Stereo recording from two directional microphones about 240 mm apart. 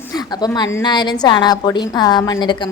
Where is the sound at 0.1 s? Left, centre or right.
Centre.